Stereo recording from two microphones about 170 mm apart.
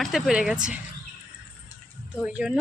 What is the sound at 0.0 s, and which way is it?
Speech, centre (ahead or behind).